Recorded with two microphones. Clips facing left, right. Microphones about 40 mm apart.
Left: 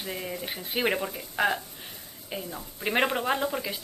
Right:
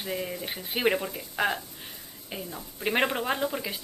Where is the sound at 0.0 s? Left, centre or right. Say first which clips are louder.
Right 1 dB; centre.